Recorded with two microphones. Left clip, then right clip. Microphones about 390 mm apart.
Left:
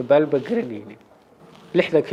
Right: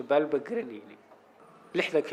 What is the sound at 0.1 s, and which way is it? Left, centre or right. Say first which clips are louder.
A man's voice: left 8 dB; left.